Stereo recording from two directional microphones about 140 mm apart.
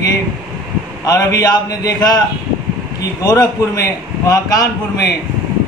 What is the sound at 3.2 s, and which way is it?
A man's voice, 25° left (ahead or behind).